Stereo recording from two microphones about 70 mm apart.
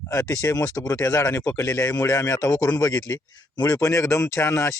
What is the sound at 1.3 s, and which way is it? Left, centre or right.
Speech, left.